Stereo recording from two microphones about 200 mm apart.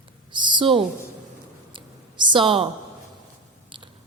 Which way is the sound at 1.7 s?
25° right (ahead or behind).